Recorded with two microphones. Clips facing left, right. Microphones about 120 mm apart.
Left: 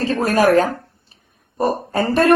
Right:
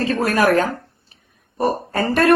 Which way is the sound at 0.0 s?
35° left (ahead or behind).